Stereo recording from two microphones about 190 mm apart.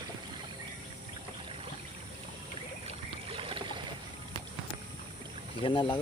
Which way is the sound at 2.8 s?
30° right (ahead or behind).